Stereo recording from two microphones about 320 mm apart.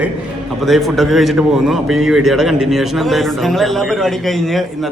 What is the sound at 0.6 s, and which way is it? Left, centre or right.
A man's voice, centre.